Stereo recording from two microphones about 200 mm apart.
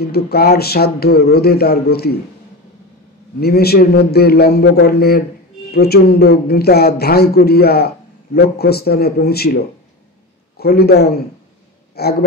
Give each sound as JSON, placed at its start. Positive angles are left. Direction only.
{"t": 0.0, "sound": "a man's voice", "side_deg": 50}
{"t": 3.3, "sound": "a man's voice", "side_deg": 50}
{"t": 10.6, "sound": "a man's voice", "side_deg": 50}
{"t": 11.9, "sound": "a sound", "side_deg": 50}